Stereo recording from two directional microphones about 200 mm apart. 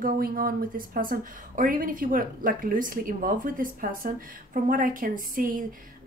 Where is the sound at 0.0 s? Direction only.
45° right (ahead or behind).